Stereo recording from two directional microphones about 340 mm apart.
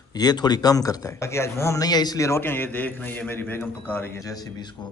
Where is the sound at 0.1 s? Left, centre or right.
Centre.